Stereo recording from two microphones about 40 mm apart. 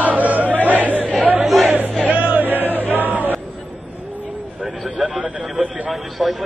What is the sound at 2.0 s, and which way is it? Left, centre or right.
Music, right.